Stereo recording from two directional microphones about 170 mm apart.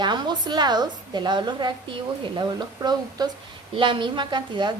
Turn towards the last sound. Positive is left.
turn(degrees=-25)  # may be behind; listen again after turning